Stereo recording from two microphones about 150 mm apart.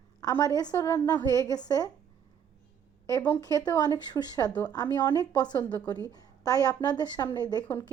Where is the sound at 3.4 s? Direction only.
25° left (ahead or behind).